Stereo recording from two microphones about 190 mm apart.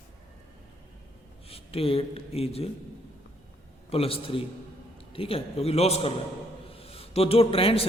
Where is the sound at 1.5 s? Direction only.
30° left (ahead or behind).